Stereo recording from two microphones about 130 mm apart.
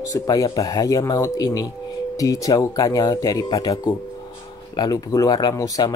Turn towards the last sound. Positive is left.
turn(degrees=25)  # may be behind; listen again after turning